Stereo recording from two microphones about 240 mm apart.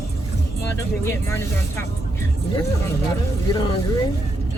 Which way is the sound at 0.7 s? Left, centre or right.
Centre.